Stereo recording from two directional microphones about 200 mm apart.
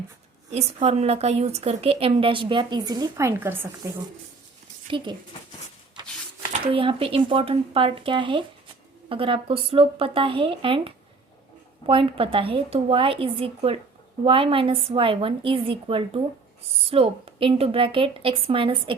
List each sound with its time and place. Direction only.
0.5 s a woman's voice: 30° right (ahead or behind); by 3.9 s 10° right (ahead or behind)
4.9 s a woman's voice: 25° right (ahead or behind)
6.5 s a woman's voice: 30° right (ahead or behind)